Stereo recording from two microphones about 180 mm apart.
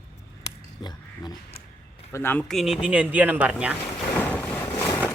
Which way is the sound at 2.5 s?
Centre (ahead or behind).